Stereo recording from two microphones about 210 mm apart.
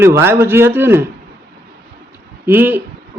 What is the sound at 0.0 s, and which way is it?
A man's voice, 10° right (ahead or behind).